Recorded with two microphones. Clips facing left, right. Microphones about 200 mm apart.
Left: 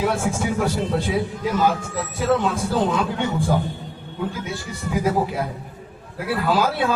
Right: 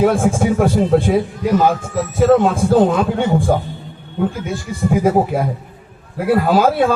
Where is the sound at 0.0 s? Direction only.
50° right (ahead or behind).